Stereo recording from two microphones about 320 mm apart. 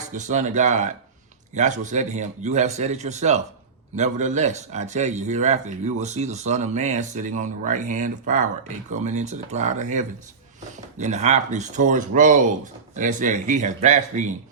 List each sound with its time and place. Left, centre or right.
0.1 s a man's voice: right